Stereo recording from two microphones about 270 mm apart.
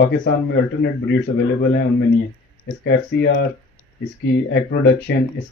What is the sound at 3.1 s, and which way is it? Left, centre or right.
Speech, left.